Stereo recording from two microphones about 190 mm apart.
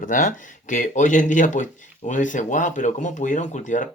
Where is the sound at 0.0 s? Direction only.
45° left (ahead or behind).